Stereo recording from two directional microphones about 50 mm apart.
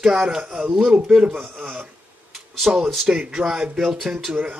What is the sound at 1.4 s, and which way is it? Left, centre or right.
Speech, right.